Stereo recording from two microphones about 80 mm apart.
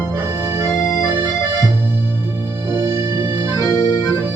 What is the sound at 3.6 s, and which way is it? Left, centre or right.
Accordion, left.